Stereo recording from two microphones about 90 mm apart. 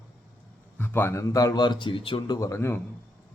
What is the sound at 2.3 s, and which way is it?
Speech, 35° left (ahead or behind).